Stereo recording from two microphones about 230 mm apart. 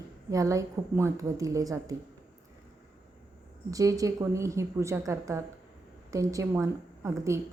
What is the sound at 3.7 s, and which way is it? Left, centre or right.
A woman's voice, centre.